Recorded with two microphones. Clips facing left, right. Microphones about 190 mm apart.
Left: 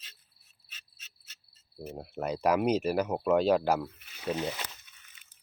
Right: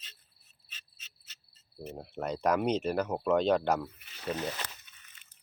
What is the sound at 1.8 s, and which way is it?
Speech, 5° left (ahead or behind).